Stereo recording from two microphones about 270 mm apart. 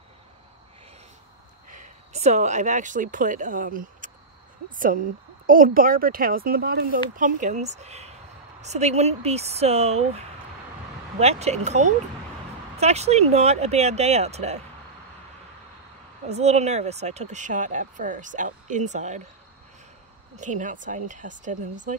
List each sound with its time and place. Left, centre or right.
1.7 s speech: right
16.3 s speech: right
20.3 s speech: right